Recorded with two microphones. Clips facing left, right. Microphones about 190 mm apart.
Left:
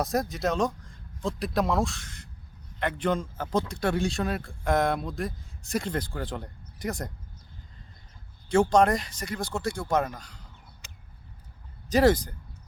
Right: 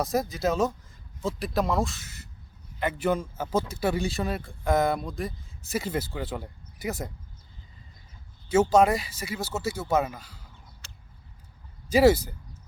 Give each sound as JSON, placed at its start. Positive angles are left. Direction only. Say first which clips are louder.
{"t": 0.0, "sound": "a man's voice", "louder": "right 1 dB", "side_deg": 0}
{"t": 8.7, "sound": "a man's voice", "louder": "right 1 dB", "side_deg": -5}
{"t": 10.8, "sound": "a sound", "louder": "left 1 dB", "side_deg": 15}
{"t": 11.9, "sound": "speech", "louder": "right 2 dB", "side_deg": -10}